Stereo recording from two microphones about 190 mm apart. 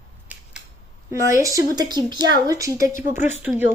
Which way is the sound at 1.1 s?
15° right (ahead or behind).